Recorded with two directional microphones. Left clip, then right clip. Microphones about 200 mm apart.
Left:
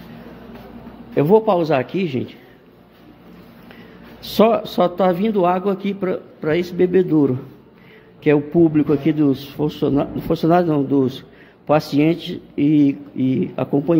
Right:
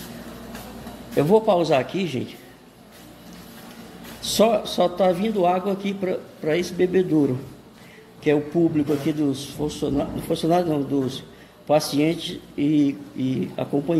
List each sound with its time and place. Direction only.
1.1 s a man's voice: 25° left (ahead or behind)
4.2 s a man's voice: 30° left (ahead or behind)